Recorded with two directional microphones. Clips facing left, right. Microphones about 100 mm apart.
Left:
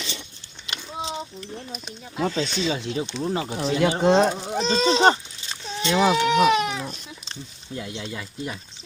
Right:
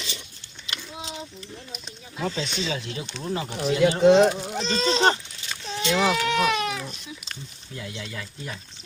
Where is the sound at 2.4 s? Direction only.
35° left (ahead or behind).